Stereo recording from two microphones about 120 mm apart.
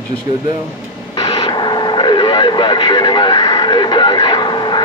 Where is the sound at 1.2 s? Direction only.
40° left (ahead or behind).